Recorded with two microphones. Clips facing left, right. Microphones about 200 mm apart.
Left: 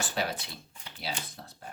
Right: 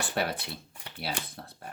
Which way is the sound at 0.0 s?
60° right (ahead or behind).